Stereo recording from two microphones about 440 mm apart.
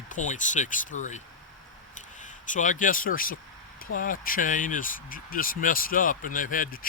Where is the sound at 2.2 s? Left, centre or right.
Centre.